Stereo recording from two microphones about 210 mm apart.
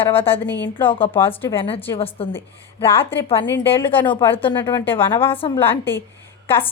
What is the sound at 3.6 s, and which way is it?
Speech, 10° left (ahead or behind).